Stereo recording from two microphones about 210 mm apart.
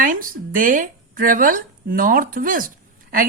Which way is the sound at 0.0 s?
40° right (ahead or behind).